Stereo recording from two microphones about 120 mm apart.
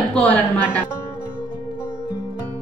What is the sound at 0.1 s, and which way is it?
Speech, 10° left (ahead or behind).